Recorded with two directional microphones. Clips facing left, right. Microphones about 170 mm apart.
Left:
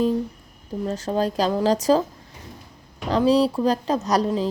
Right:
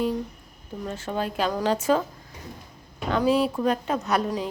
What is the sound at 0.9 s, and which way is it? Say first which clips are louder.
Speech: left 5 dB; 40° left (ahead or behind).